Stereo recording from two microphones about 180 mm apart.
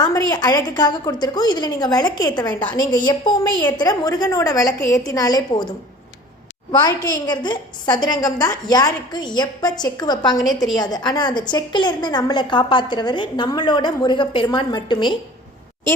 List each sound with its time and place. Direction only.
0.0 s a woman's voice: 20° left (ahead or behind)